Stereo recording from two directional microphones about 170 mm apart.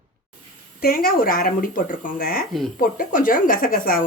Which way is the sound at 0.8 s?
60° left (ahead or behind).